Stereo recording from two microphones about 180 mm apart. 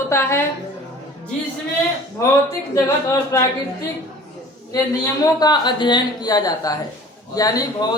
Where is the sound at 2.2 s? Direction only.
15° left (ahead or behind).